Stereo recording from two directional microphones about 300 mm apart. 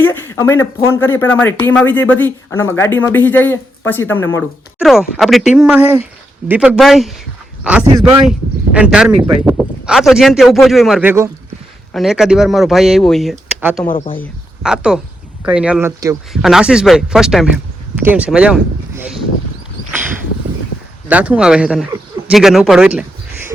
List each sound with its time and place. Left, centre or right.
0.0 s speech: centre
13.8 s speech: centre
14.2 s speech: centre
21.1 s a man's voice: centre